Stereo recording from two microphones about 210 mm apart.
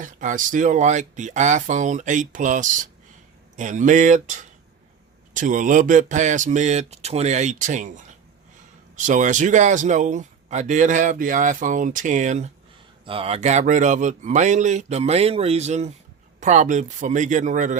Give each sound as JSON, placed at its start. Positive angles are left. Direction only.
{"t": 0.0, "sound": "a man's voice", "side_deg": -40}
{"t": 9.0, "sound": "a man's voice", "side_deg": -35}